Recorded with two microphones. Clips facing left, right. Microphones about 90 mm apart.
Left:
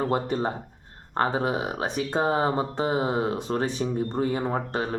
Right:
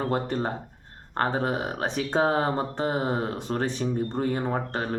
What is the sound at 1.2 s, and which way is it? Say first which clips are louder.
Speech: left 1 dB; 15° left (ahead or behind).